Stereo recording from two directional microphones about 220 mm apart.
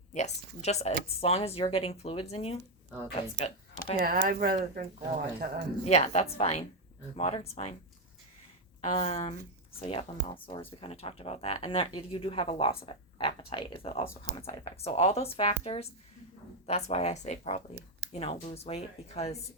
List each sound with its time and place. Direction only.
0.1 s speech: 30° left (ahead or behind)
3.9 s speech: 40° right (ahead or behind)
5.8 s speech: 30° left (ahead or behind)
8.8 s speech: 30° left (ahead or behind)